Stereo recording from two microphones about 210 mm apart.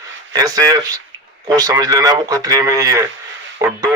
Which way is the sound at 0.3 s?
15° right (ahead or behind).